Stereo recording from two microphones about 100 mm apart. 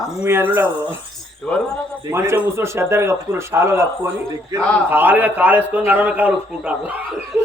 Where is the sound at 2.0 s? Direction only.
25° right (ahead or behind).